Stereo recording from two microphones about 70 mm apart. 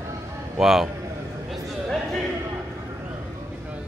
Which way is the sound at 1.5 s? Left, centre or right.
Centre.